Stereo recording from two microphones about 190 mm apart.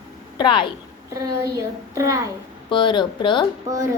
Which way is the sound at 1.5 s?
15° right (ahead or behind).